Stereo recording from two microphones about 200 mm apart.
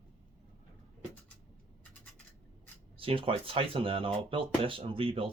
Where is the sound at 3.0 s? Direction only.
25° right (ahead or behind).